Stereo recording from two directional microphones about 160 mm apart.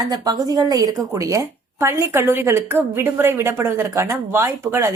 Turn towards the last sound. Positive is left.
turn(degrees=-15)  # may be behind; listen again after turning